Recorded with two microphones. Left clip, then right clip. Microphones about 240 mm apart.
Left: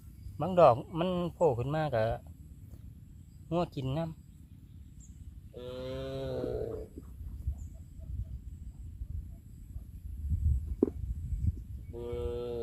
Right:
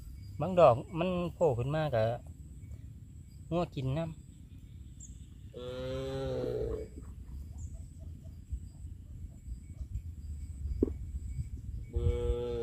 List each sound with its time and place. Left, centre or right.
0.3 s speech: left
3.5 s speech: left
5.5 s cattle: centre
11.9 s a sound: centre